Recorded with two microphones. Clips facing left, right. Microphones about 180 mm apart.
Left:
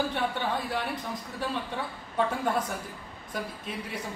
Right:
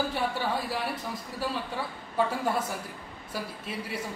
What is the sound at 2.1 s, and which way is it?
Speech, 5° right (ahead or behind).